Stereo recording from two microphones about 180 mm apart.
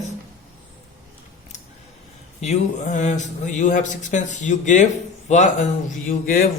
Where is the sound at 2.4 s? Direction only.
40° left (ahead or behind).